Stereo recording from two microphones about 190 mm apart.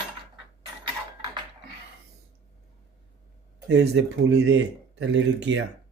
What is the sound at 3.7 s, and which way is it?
Speech, 65° right (ahead or behind).